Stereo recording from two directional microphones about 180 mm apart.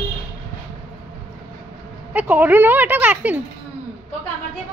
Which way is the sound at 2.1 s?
10° right (ahead or behind).